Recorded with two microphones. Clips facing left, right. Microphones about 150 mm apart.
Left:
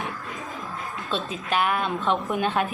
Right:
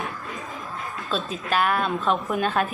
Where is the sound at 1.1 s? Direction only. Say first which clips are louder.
Right 1 dB; 20° left (ahead or behind).